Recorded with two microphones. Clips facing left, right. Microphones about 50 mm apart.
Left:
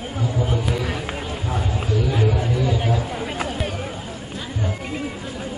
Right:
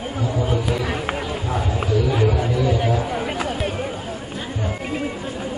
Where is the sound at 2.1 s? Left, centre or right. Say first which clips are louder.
Right 2 dB; centre.